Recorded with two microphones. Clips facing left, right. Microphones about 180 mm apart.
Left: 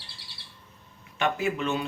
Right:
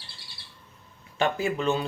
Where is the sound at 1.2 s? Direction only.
35° right (ahead or behind).